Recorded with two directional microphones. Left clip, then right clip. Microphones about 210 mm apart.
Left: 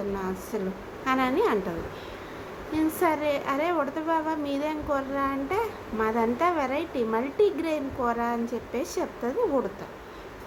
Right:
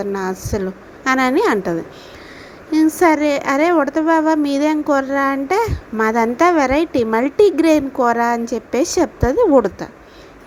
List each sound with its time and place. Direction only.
0.1 s a woman's voice: 40° right (ahead or behind)
2.7 s a woman's voice: 35° right (ahead or behind)